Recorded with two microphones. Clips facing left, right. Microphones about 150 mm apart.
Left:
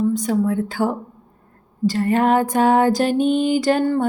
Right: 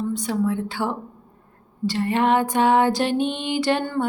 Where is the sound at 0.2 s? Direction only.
40° left (ahead or behind).